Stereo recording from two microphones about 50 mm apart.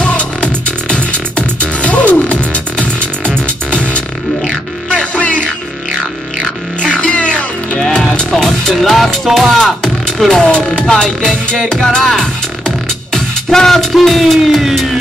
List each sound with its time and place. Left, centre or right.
0.0 s music: left
4.8 s music: left
7.0 s music: left
7.7 s music: centre
10.4 s speech: left
10.9 s music: centre
11.7 s music: centre
12.0 s speech: centre